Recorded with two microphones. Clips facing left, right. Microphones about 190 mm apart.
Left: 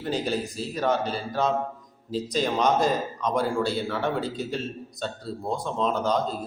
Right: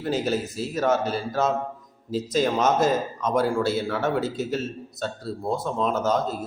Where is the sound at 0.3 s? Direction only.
45° right (ahead or behind).